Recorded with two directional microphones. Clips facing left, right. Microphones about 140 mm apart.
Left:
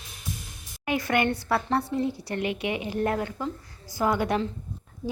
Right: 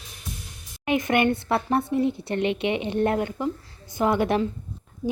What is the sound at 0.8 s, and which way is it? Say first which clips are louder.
A woman's voice: right 3 dB; 20° right (ahead or behind).